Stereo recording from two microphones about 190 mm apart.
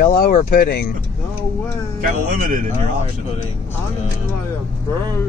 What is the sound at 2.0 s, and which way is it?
Speech, 45° right (ahead or behind).